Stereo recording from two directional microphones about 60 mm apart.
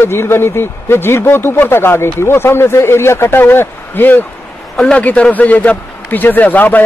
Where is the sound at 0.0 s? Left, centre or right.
Left.